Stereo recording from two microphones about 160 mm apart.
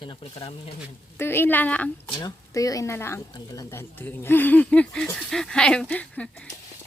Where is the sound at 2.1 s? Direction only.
25° left (ahead or behind); by 6.4 s 5° left (ahead or behind).